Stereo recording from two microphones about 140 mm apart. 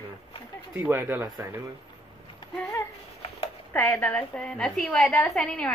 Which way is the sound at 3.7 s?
10° left (ahead or behind).